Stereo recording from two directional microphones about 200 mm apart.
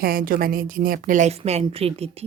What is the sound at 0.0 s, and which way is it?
A woman's voice, 45° right (ahead or behind).